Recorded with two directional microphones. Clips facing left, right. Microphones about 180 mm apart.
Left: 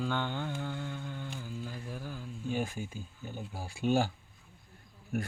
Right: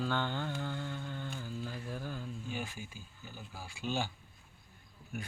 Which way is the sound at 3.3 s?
30° left (ahead or behind).